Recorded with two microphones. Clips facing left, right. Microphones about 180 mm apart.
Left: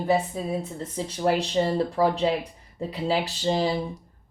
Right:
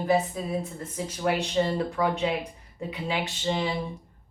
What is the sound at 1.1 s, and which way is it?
Speech, 30° left (ahead or behind).